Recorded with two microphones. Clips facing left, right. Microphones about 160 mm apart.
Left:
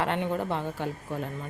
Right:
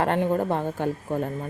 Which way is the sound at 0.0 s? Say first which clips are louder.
Right 5 dB; 45° right (ahead or behind).